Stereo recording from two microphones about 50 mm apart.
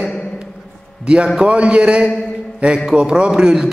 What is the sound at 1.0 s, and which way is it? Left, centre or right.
A man's voice, centre.